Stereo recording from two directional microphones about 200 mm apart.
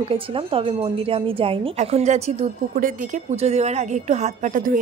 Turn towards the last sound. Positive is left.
turn(degrees=-40)  # may be behind; listen again after turning